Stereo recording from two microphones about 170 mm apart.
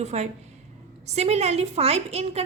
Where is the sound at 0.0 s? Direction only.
40° right (ahead or behind).